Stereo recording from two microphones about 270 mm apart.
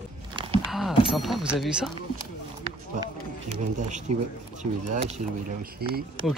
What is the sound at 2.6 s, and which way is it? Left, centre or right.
Run, centre.